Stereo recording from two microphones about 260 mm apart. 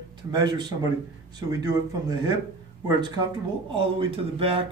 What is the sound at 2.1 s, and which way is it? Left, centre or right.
Speech, centre.